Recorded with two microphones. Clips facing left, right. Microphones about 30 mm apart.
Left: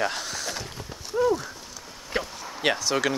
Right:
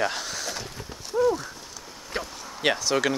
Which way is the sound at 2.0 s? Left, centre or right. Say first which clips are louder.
Left 3 dB; centre.